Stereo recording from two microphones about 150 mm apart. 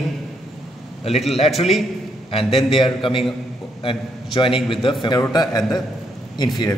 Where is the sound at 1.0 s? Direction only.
40° left (ahead or behind).